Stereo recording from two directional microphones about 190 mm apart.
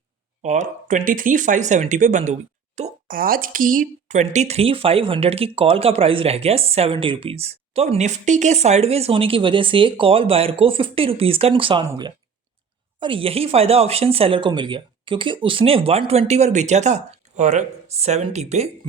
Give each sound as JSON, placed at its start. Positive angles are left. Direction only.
{"t": 0.4, "sound": "speech", "side_deg": -40}